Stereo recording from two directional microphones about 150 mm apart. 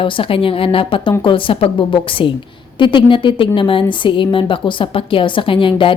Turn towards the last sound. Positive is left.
turn(degrees=35)  # may be behind; listen again after turning